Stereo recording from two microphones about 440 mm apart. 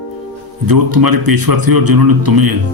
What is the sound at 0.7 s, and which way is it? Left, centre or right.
Speech, right.